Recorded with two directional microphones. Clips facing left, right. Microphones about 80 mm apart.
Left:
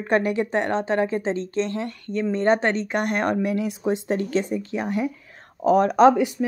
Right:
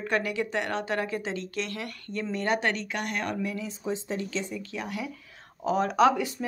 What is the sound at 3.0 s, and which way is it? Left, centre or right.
Speech, left.